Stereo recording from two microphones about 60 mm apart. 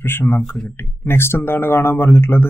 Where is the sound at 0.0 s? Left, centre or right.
Left.